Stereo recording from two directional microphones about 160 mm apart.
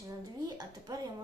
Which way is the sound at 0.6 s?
25° right (ahead or behind).